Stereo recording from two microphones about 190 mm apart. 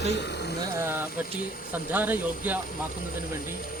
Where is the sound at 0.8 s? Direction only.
10° right (ahead or behind).